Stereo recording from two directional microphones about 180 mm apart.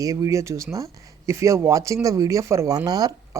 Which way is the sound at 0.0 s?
20° right (ahead or behind).